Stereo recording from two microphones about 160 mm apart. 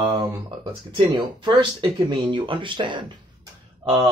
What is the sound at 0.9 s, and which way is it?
Speech, 30° right (ahead or behind).